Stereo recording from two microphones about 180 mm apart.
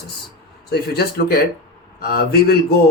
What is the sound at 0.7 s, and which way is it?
Speech, 60° left (ahead or behind).